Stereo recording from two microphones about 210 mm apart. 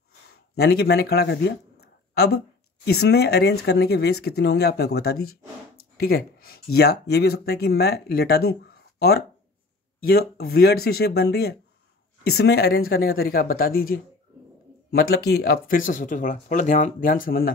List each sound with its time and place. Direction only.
0.6 s speech: 50° left (ahead or behind)
9.9 s speech: 50° left (ahead or behind)